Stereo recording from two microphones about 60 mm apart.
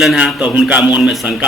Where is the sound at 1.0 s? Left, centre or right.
Centre.